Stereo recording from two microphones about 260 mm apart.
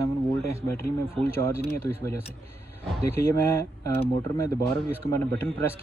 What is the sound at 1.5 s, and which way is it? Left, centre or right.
Speech, left.